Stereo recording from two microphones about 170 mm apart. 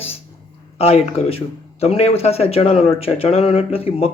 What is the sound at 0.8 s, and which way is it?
Speech, 35° left (ahead or behind).